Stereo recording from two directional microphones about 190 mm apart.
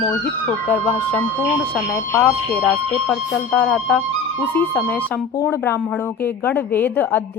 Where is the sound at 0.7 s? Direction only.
10° left (ahead or behind).